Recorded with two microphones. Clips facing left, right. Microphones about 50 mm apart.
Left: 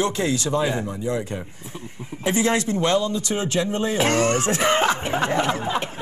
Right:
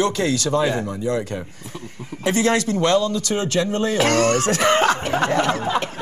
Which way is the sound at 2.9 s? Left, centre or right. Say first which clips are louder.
Right 3 dB; right.